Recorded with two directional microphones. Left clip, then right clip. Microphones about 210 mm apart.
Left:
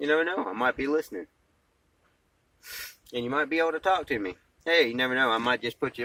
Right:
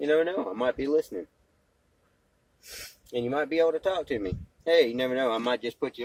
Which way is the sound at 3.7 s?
25° left (ahead or behind).